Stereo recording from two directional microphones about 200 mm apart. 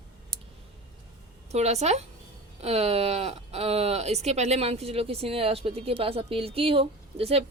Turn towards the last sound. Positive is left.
turn(degrees=-30)  # may be behind; listen again after turning